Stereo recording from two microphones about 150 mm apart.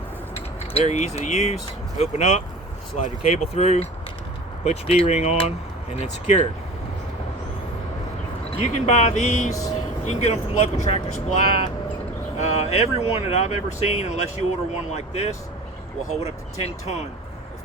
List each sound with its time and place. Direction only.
0.3 s speech: 40° left (ahead or behind)
3.3 s speech: 45° left (ahead or behind)
8.5 s speech: 45° left (ahead or behind)
9.5 s speech: 20° left (ahead or behind)
10.0 s speech: 50° left (ahead or behind)
12.4 s speech: 45° left (ahead or behind)